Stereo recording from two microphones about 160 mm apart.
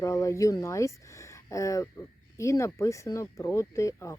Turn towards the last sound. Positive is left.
turn(degrees=20)  # may be behind; listen again after turning